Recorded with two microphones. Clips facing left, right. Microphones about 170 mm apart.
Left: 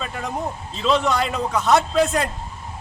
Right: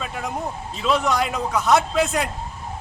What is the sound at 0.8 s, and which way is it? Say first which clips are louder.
A man's voice: left 1 dB; 5° right (ahead or behind).